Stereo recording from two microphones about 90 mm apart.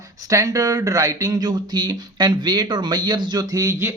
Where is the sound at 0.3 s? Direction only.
40° right (ahead or behind).